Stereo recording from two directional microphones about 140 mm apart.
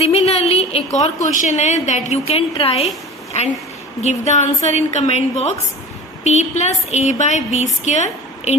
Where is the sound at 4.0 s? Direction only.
55° left (ahead or behind).